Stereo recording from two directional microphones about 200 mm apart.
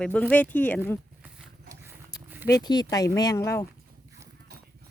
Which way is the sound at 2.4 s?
20° left (ahead or behind).